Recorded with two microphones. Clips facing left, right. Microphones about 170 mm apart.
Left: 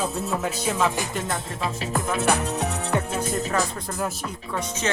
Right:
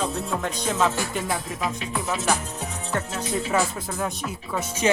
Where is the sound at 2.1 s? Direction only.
60° left (ahead or behind).